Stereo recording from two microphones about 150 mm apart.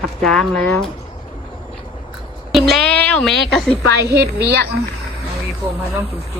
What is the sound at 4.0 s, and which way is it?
Speech, 90° right.